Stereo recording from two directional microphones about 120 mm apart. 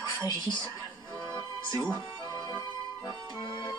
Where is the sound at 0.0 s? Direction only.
35° left (ahead or behind).